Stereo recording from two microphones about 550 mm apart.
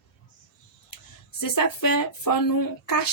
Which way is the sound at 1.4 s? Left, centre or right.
Left.